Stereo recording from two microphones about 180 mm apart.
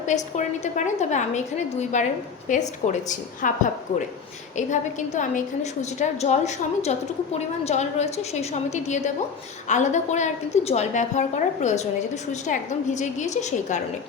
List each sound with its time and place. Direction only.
0.3 s a woman's voice: 40° left (ahead or behind)
4.5 s a woman's voice: 40° left (ahead or behind)